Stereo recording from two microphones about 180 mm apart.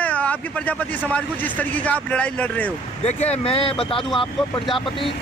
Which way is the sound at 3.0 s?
35° left (ahead or behind).